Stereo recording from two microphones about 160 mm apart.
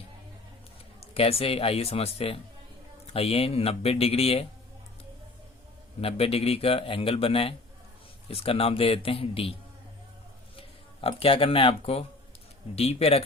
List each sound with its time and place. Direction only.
1.1 s a man's voice: 35° left (ahead or behind)
6.0 s a man's voice: 35° left (ahead or behind)
11.0 s a man's voice: 35° left (ahead or behind)